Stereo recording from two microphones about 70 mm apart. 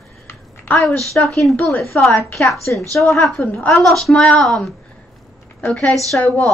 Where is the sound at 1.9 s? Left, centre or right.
Left.